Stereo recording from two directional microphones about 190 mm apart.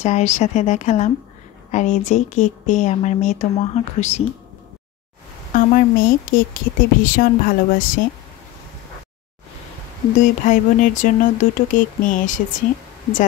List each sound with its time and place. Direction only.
0.0 s speech: 35° left (ahead or behind)
5.5 s speech: 45° left (ahead or behind)
10.1 s speech: 40° left (ahead or behind)